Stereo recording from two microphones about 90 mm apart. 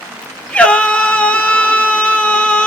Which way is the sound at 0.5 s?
15° left (ahead or behind).